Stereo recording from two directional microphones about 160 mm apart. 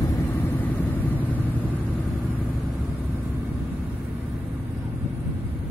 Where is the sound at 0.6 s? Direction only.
10° left (ahead or behind).